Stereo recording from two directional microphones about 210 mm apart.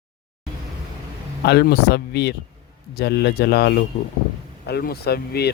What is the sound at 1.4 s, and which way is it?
Speech, 50° left (ahead or behind).